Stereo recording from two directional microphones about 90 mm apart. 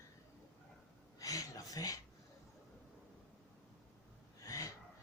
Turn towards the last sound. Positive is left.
turn(degrees=40)  # may be behind; listen again after turning